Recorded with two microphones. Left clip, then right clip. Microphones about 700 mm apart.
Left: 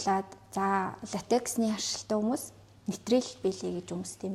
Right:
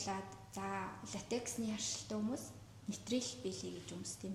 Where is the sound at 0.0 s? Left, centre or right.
Left.